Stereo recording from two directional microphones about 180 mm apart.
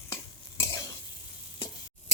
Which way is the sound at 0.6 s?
20° left (ahead or behind).